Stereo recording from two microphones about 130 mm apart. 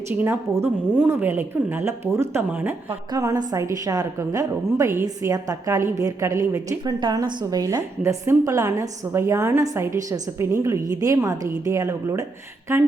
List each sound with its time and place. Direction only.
0.1 s a woman's voice: 15° right (ahead or behind)
3.1 s a woman's voice: 25° right (ahead or behind)